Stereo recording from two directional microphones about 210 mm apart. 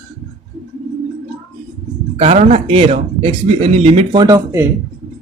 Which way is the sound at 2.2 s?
30° right (ahead or behind).